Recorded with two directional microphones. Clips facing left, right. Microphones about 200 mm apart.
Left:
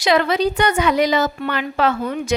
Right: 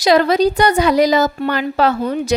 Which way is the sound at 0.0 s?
40° right (ahead or behind).